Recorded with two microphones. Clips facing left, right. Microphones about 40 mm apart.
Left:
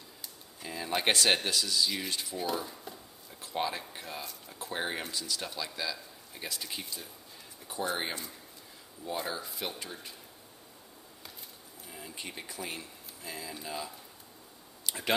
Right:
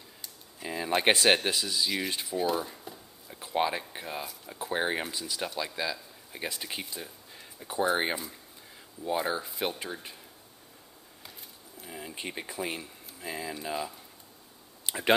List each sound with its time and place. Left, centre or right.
0.6 s speech: centre
3.3 s a sound: right
3.9 s speech: centre
11.8 s speech: right